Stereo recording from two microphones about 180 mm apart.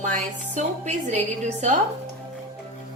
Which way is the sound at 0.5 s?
40° right (ahead or behind).